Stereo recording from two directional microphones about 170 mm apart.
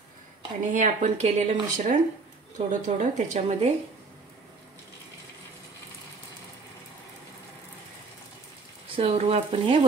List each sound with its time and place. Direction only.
0.7 s a woman's voice: 45° right (ahead or behind)
8.9 s speech: 35° right (ahead or behind)